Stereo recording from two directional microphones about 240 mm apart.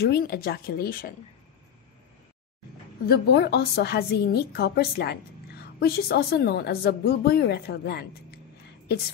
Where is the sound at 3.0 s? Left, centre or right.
Left.